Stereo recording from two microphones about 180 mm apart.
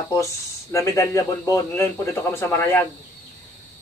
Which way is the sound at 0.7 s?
15° left (ahead or behind).